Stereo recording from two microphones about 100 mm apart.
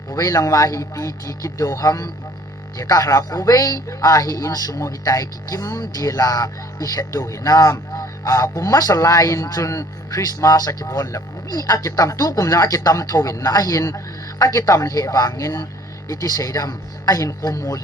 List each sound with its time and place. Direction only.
0.1 s speech: 35° left (ahead or behind)